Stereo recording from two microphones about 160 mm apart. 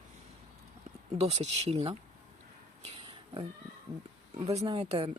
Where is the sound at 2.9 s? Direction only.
35° right (ahead or behind).